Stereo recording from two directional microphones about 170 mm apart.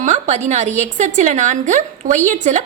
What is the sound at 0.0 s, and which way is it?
A woman's voice, 40° right (ahead or behind).